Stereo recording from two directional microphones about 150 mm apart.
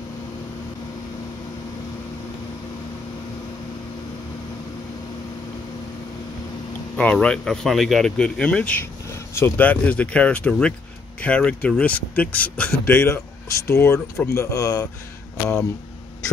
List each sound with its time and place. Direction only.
7.0 s speech: 10° left (ahead or behind); by 14.9 s 25° left (ahead or behind)
15.3 s speech: 10° left (ahead or behind)